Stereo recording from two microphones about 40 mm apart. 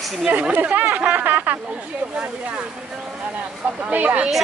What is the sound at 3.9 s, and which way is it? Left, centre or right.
Speech, right.